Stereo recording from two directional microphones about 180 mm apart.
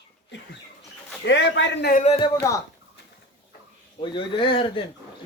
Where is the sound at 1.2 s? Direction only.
75° left (ahead or behind).